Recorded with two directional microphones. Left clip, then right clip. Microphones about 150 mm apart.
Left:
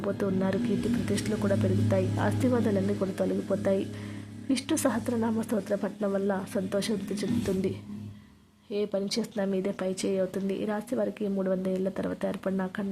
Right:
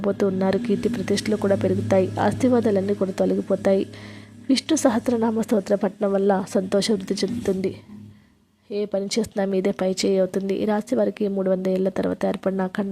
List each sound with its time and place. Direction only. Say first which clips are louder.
0.0 s speech: right 8 dB; 35° right (ahead or behind)
8.7 s speech: right 5 dB; 35° right (ahead or behind)